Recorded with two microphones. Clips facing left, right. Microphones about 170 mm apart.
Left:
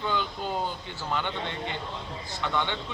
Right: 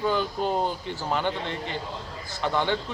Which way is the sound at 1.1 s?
35° right (ahead or behind).